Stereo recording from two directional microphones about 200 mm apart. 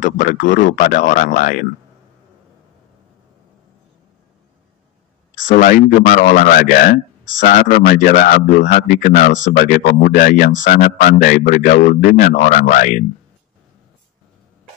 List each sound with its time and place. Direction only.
0.0 s speech: 40° left (ahead or behind)
5.5 s a man's voice: 40° left (ahead or behind)